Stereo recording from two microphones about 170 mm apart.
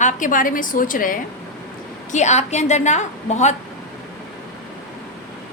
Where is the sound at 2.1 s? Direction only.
45° left (ahead or behind).